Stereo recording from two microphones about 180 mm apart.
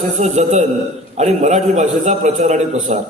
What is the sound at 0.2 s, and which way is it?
A man's voice, 40° right (ahead or behind).